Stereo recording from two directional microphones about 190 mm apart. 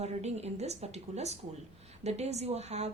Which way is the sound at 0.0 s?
35° right (ahead or behind).